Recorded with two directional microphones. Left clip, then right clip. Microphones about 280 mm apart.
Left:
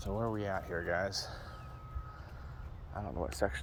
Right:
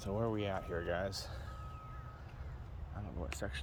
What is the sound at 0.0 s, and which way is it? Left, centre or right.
Speech, centre.